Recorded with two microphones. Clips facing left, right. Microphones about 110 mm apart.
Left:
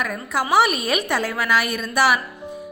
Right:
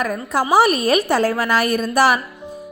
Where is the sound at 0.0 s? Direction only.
40° right (ahead or behind).